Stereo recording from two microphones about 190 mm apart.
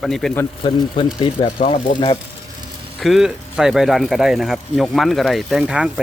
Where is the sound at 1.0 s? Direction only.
30° left (ahead or behind).